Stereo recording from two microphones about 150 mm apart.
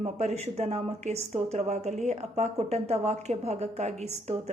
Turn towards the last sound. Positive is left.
turn(degrees=-50)  # may be behind; listen again after turning